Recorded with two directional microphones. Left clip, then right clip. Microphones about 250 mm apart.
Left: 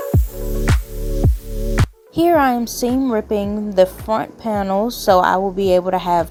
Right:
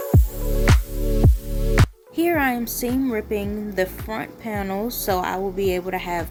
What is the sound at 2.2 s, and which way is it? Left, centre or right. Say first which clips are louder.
Music: left 7 dB; left.